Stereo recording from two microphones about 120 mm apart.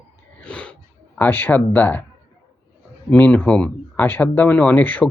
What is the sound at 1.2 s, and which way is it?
Speech, 15° left (ahead or behind).